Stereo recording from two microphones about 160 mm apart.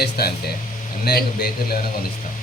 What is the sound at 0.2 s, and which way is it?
Speech, 75° left (ahead or behind).